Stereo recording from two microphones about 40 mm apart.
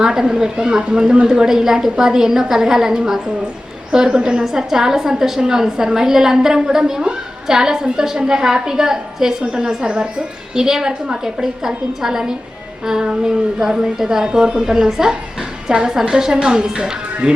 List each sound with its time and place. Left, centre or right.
0.0 s a woman's voice: centre
14.3 s a woman's voice: right